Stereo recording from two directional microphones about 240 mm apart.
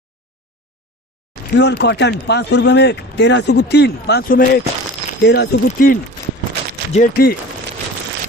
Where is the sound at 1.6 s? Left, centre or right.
Left.